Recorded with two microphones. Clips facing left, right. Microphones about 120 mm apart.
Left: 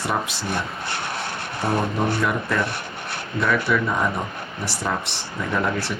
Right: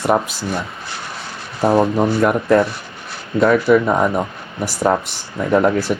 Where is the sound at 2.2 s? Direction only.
50° right (ahead or behind).